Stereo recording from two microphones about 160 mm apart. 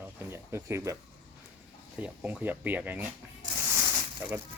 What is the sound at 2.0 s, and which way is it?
Speech, 10° right (ahead or behind).